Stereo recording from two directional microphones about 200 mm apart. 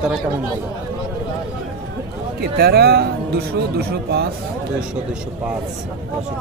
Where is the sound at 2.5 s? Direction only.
50° right (ahead or behind).